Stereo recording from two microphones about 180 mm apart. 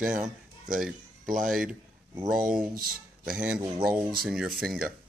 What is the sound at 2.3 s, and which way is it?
Speech, 50° right (ahead or behind).